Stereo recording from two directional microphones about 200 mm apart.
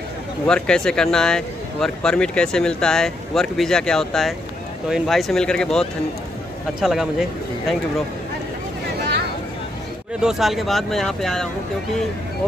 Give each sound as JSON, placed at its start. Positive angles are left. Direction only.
{"t": 0.5, "sound": "speech", "side_deg": 5}
{"t": 10.2, "sound": "speech", "side_deg": 0}